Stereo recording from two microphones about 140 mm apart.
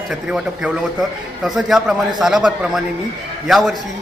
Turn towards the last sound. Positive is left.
turn(degrees=0)  # may be behind; listen again after turning